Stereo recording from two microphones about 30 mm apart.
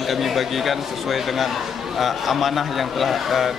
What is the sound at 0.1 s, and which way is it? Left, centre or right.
A man's voice, centre.